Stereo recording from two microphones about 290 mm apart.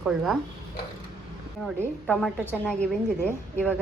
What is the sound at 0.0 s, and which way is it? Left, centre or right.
Speech, centre.